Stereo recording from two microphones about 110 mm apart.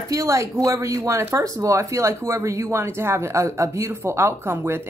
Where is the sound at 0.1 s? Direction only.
30° right (ahead or behind).